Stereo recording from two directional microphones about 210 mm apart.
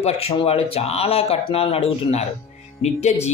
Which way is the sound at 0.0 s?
30° left (ahead or behind).